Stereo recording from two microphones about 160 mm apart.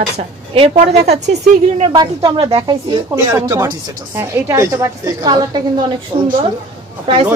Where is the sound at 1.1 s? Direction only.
45° right (ahead or behind).